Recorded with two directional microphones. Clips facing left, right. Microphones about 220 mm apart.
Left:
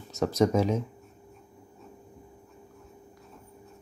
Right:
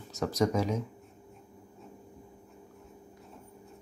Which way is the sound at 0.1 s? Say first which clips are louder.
Left 4 dB; 25° left (ahead or behind).